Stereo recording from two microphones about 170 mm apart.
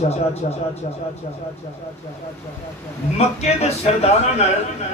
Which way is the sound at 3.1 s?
40° left (ahead or behind).